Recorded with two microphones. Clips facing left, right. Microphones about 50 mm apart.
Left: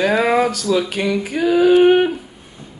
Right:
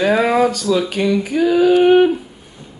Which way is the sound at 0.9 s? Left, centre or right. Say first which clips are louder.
Right 3 dB; left.